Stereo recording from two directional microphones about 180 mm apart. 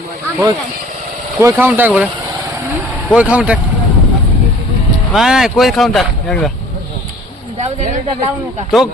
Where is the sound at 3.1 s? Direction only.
5° right (ahead or behind).